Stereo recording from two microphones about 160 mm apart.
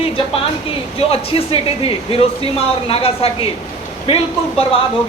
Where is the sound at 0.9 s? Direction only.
35° left (ahead or behind).